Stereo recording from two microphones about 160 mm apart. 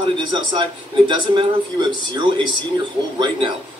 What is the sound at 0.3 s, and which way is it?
Speech, 30° right (ahead or behind).